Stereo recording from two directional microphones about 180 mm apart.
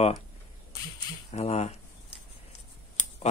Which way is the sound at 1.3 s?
35° left (ahead or behind).